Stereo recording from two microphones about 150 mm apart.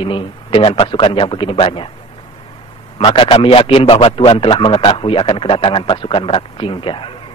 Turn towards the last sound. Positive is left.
turn(degrees=35)  # may be behind; listen again after turning